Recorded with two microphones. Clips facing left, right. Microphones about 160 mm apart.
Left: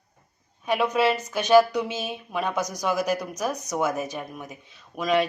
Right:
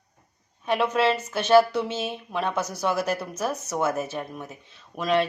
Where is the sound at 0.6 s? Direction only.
10° left (ahead or behind).